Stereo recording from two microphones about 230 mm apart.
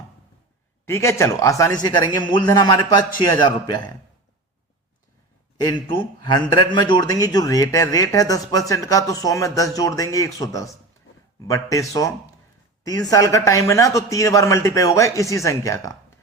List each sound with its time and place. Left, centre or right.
0.9 s a man's voice: centre
5.6 s a man's voice: centre